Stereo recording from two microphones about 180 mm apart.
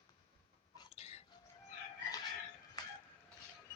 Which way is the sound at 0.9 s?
35° left (ahead or behind).